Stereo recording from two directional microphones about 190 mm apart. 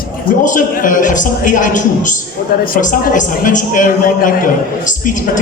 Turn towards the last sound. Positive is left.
turn(degrees=45)  # may be behind; listen again after turning